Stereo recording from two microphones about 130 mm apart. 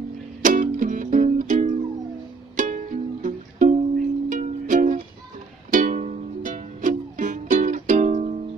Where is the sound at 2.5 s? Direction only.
85° right.